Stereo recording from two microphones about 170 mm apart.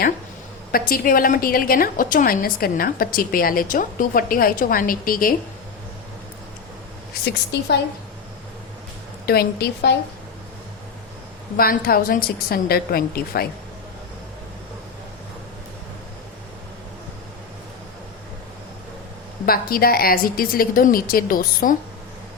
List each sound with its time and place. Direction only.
0.7 s a woman's voice: 60° left (ahead or behind)
7.3 s a woman's voice: 75° left (ahead or behind)
9.2 s a woman's voice: 65° left (ahead or behind)
11.5 s a woman's voice: 60° left (ahead or behind)
19.5 s a woman's voice: 60° left (ahead or behind)